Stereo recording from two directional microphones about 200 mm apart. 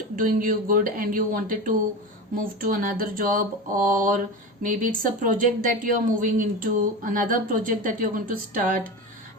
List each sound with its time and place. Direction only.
0.2 s speech: 45° right (ahead or behind)